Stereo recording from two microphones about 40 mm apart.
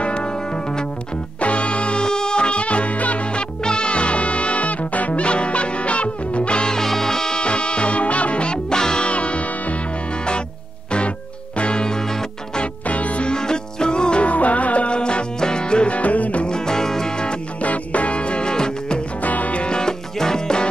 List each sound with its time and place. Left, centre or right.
0.0 s music: left
1.4 s music: left
6.8 s music: centre
9.0 s music: left
10.9 s music: left; by 12.6 s centre
12.8 s music: left
13.3 s music: centre
14.2 s music: left
16.0 s music: left
16.4 s music: centre
17.6 s music: left
19.2 s music: left; by 20.6 s centre